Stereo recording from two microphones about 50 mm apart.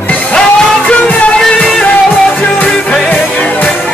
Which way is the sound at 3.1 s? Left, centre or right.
Left.